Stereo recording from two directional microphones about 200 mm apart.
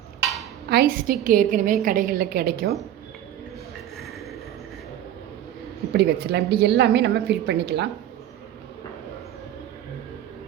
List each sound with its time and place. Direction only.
0.7 s a woman's voice: 50° right (ahead or behind)
5.9 s a woman's voice: 55° right (ahead or behind)